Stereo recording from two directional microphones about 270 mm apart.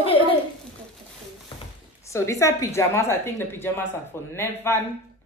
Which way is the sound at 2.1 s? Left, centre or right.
Centre.